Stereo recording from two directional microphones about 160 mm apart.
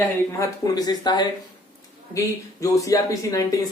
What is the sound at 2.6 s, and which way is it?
Speech, 20° left (ahead or behind).